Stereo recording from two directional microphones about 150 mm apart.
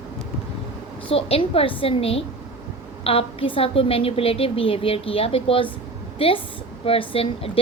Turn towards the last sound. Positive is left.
turn(degrees=40)  # may be behind; listen again after turning